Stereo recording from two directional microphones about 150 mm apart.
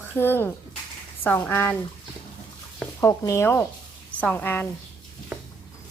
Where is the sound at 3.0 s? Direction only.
20° left (ahead or behind).